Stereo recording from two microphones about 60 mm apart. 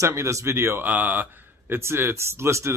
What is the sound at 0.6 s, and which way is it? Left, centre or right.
Speech, right.